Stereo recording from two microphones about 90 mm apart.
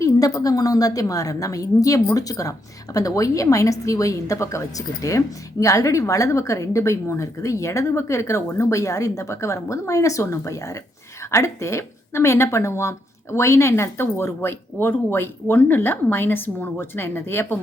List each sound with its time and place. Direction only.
0.0 s a woman's voice: 40° left (ahead or behind)